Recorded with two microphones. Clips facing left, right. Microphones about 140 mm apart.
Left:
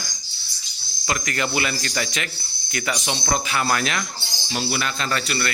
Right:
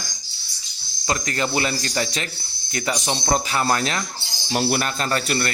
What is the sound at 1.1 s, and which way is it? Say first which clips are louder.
A man's voice: right 1 dB; 30° right (ahead or behind).